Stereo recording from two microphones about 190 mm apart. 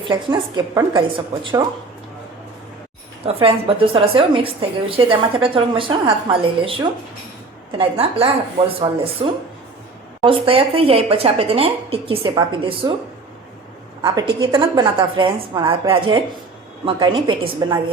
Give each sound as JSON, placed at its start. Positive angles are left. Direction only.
{"t": 0.0, "sound": "a woman's voice", "side_deg": -25}
{"t": 3.2, "sound": "a woman's voice", "side_deg": -30}
{"t": 7.8, "sound": "a woman's voice", "side_deg": -30}
{"t": 14.0, "sound": "a woman's voice", "side_deg": -20}